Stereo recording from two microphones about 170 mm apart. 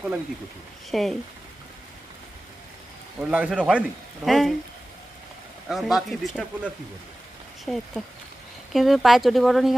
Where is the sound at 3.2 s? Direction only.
5° right (ahead or behind).